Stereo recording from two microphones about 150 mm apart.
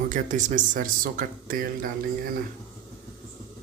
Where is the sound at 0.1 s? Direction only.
55° right (ahead or behind).